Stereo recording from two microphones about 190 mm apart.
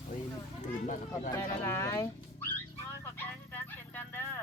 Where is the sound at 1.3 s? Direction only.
15° left (ahead or behind).